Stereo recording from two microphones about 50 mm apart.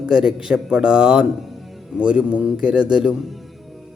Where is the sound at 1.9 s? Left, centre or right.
Centre.